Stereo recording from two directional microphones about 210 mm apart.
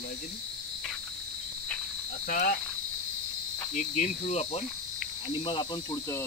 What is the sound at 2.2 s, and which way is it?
Cricket, 40° left (ahead or behind).